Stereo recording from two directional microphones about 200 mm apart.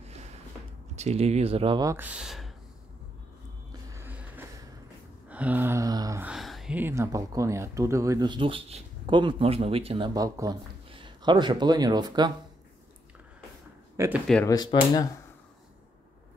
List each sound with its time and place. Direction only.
0.9 s speech: 30° right (ahead or behind); by 2.5 s centre (ahead or behind)
3.9 s a sound: 10° right (ahead or behind)
6.2 s speech: centre (ahead or behind); by 12.3 s 20° right (ahead or behind)
13.9 s speech: 10° right (ahead or behind)
14.4 s speech: 20° left (ahead or behind)